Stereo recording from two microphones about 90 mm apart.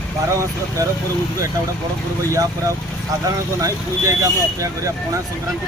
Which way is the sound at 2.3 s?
40° right (ahead or behind).